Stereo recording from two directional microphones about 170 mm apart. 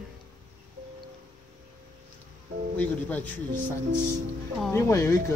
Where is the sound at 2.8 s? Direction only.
10° left (ahead or behind).